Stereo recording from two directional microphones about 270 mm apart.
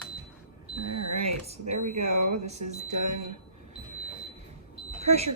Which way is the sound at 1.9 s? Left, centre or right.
Right.